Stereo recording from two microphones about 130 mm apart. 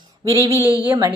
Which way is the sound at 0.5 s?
15° right (ahead or behind).